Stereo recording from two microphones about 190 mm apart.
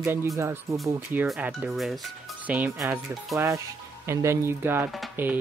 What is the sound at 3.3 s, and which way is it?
Speech, 15° right (ahead or behind).